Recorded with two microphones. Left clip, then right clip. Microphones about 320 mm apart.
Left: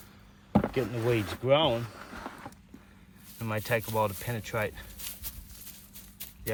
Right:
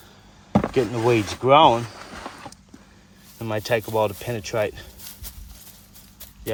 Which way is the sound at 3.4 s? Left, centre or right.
Centre.